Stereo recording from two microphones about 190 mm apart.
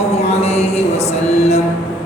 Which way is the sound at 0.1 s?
35° left (ahead or behind).